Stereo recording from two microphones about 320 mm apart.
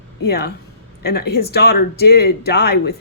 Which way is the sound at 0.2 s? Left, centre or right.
Left.